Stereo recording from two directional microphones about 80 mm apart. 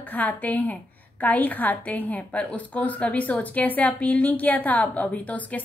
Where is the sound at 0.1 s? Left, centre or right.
Centre.